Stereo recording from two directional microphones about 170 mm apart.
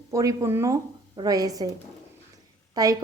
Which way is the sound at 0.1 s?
20° right (ahead or behind).